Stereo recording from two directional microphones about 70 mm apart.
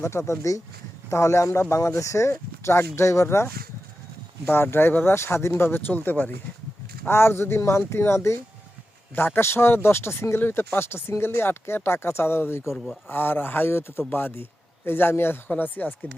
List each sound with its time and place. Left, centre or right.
0.0 s speech: left
7.1 s speech: left
9.1 s speech: left
12.7 s speech: centre
13.1 s speech: left